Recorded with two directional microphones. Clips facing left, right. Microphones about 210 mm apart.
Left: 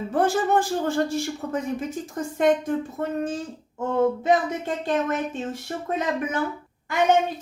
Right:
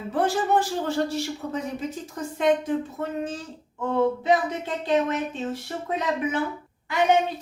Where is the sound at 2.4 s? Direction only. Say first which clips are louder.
Left 1 dB; 50° left (ahead or behind).